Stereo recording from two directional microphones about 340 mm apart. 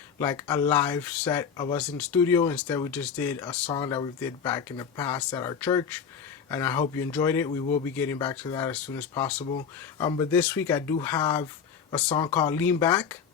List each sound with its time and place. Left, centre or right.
0.2 s speech: centre
9.4 s speech: centre